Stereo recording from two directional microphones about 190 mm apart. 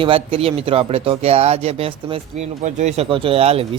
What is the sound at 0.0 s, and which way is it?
Speech, 30° right (ahead or behind).